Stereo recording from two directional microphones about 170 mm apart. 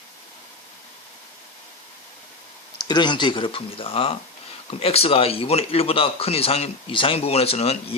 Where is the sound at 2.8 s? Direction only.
25° left (ahead or behind).